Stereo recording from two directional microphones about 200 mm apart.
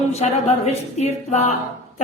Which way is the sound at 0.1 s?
30° left (ahead or behind).